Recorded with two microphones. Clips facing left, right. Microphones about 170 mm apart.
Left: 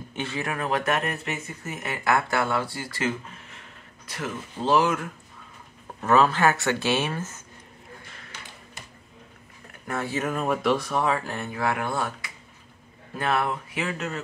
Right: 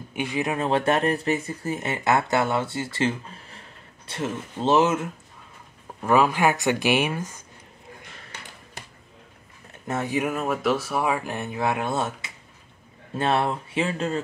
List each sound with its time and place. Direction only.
0.1 s speech: 15° right (ahead or behind)
6.0 s speech: 10° right (ahead or behind)
9.7 s speech: 20° right (ahead or behind)